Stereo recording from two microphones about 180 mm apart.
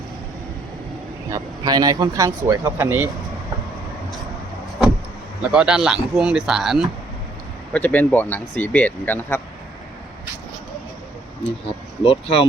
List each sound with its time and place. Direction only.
1.3 s speech: 20° right (ahead or behind)
5.4 s speech: 5° right (ahead or behind)
7.7 s speech: 10° left (ahead or behind)
11.6 s speech: 30° left (ahead or behind)